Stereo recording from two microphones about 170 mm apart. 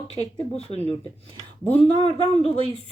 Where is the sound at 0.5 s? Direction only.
40° left (ahead or behind).